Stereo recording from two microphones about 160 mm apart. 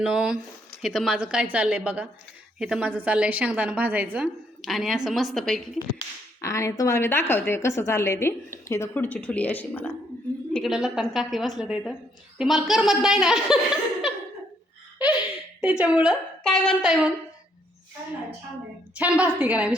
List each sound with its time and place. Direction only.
0.0 s a woman's voice: 5° right (ahead or behind)
6.4 s a woman's voice: 20° left (ahead or behind)
10.5 s a woman's voice: centre (ahead or behind)
15.6 s a woman's voice: 10° right (ahead or behind)
16.4 s speech: 5° left (ahead or behind)
18.9 s a woman's voice: 10° right (ahead or behind)